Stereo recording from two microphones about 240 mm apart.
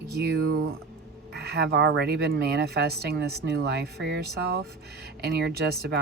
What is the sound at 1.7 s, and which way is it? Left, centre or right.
Speech, right.